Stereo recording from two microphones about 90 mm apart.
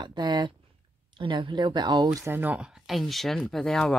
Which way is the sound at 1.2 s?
65° right (ahead or behind).